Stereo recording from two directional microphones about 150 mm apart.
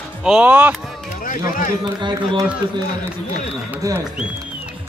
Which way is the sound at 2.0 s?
30° right (ahead or behind).